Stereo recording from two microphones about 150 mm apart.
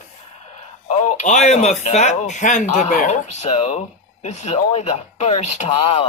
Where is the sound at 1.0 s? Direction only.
50° left (ahead or behind).